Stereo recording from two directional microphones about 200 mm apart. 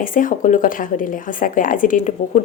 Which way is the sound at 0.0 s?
40° left (ahead or behind).